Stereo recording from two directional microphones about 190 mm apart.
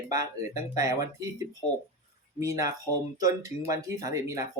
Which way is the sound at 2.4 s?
15° right (ahead or behind).